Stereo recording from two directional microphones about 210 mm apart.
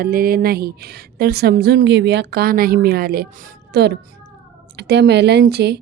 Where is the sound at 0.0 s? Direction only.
45° right (ahead or behind).